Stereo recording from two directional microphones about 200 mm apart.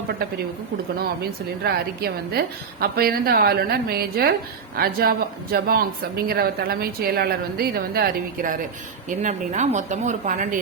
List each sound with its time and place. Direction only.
0.9 s a woman's voice: 50° right (ahead or behind)